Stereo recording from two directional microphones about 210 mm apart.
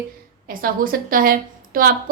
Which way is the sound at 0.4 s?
40° right (ahead or behind).